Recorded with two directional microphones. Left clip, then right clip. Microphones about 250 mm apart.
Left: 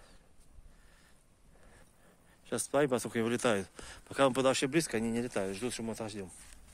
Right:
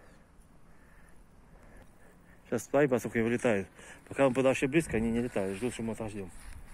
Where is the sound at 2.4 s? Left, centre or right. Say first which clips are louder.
Right 3 dB; centre.